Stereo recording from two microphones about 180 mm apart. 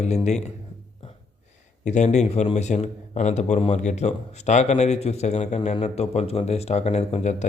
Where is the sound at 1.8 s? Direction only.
40° left (ahead or behind).